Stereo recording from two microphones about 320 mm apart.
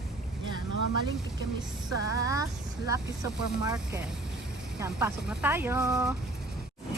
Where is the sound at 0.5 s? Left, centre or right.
Left.